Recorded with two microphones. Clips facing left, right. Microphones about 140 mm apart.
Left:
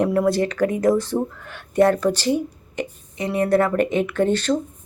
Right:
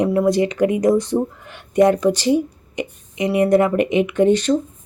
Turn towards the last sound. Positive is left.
turn(degrees=-15)  # may be behind; listen again after turning